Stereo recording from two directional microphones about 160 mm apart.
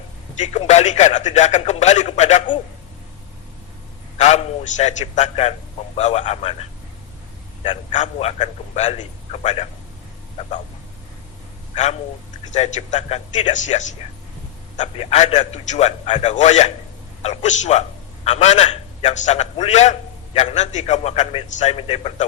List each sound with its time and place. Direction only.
0.3 s a man's voice: 45° left (ahead or behind)
4.2 s a man's voice: 45° left (ahead or behind)
11.7 s a man's voice: 45° left (ahead or behind)